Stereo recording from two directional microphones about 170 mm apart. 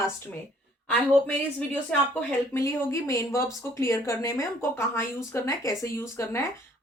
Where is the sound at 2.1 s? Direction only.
15° left (ahead or behind).